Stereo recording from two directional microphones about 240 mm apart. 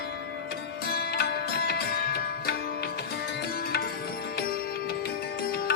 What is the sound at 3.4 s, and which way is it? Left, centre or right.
Music, left.